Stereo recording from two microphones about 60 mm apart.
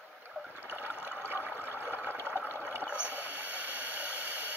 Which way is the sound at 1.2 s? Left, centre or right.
Right.